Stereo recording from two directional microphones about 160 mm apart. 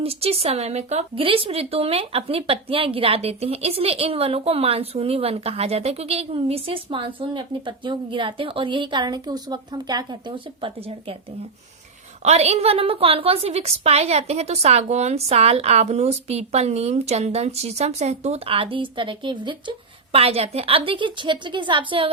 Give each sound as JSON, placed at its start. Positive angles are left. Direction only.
{"t": 0.0, "sound": "a woman's voice", "side_deg": -40}
{"t": 12.2, "sound": "a woman's voice", "side_deg": -40}